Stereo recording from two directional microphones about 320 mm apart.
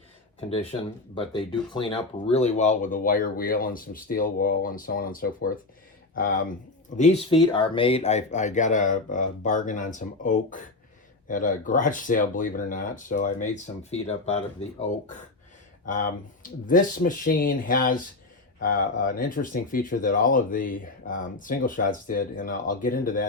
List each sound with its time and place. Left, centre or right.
0.3 s speech: centre
6.9 s speech: left
15.9 s speech: left